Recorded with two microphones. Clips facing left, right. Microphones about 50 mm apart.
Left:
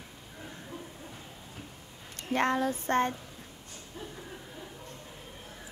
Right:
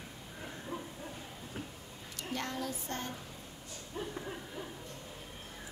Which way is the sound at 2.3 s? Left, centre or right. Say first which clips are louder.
Left 11 dB; left.